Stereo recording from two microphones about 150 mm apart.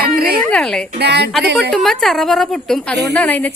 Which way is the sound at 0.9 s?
90° right.